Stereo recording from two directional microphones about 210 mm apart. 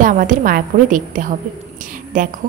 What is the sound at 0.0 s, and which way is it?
A woman's voice, 40° right (ahead or behind).